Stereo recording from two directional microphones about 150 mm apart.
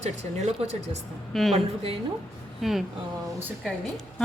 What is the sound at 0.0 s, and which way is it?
Speech, 50° right (ahead or behind).